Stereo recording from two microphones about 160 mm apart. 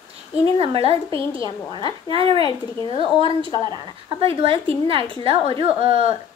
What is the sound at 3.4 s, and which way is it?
Speech, 20° left (ahead or behind).